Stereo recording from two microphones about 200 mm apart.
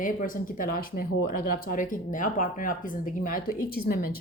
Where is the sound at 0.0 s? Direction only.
45° left (ahead or behind).